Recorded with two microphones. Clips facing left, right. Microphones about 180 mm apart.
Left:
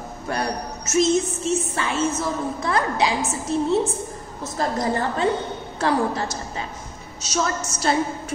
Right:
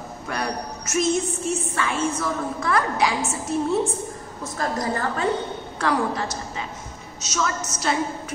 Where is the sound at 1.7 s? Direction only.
25° left (ahead or behind).